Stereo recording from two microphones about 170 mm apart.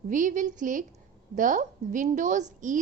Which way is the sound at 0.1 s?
50° right (ahead or behind).